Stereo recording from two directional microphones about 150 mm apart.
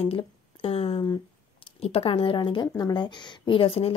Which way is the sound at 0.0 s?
40° left (ahead or behind).